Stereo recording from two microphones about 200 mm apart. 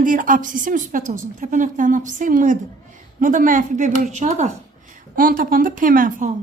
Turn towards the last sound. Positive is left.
turn(degrees=-45)  # may be behind; listen again after turning